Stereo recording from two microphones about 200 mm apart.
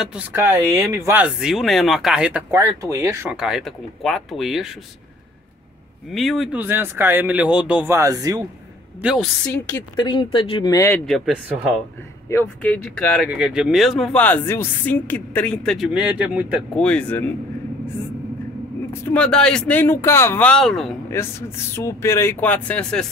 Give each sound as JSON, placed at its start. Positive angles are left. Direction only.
{"t": 0.0, "sound": "speech", "side_deg": -5}
{"t": 6.1, "sound": "speech", "side_deg": 0}
{"t": 9.0, "sound": "speech", "side_deg": 0}
{"t": 9.9, "sound": "speech", "side_deg": 25}
{"t": 11.1, "sound": "speech", "side_deg": 0}
{"t": 12.3, "sound": "speech", "side_deg": 10}
{"t": 16.8, "sound": "speech", "side_deg": 5}
{"t": 18.9, "sound": "speech", "side_deg": 10}
{"t": 21.1, "sound": "speech", "side_deg": 10}